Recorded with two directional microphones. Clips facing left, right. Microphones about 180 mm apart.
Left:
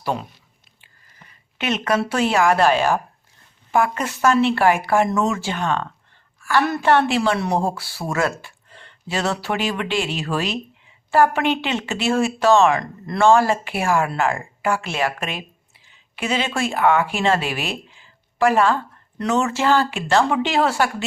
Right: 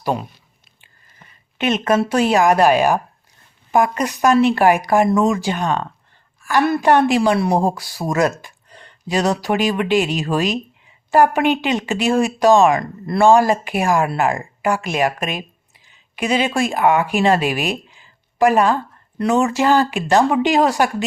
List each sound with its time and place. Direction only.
0.0 s speech: 15° right (ahead or behind)
2.3 s a woman's voice: 15° right (ahead or behind)